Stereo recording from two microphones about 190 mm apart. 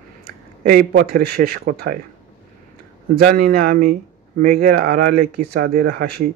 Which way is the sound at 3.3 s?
50° right (ahead or behind).